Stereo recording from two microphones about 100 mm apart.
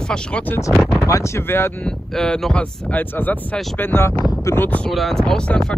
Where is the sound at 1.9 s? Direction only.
5° left (ahead or behind); by 4.2 s 25° left (ahead or behind).